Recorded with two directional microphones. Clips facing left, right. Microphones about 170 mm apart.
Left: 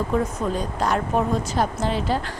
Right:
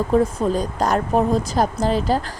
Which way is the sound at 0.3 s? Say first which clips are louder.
Right 4 dB; 40° right (ahead or behind).